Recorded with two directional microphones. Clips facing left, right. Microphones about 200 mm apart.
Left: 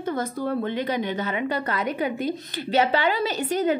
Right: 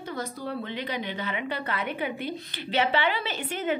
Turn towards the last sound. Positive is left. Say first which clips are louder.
# left 6 dB
turn(degrees=40)  # may be behind; listen again after turning